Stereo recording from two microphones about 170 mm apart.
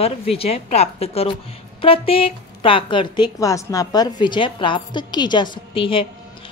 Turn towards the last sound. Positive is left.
turn(degrees=30)  # may be behind; listen again after turning